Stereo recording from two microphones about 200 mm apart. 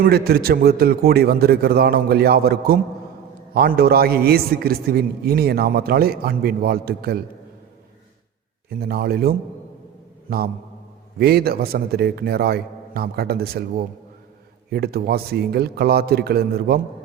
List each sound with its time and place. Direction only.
0.0 s a man's voice: 50° right (ahead or behind)
8.7 s a man's voice: 50° right (ahead or behind)